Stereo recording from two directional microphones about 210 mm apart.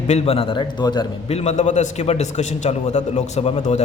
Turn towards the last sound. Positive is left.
turn(degrees=30)  # may be behind; listen again after turning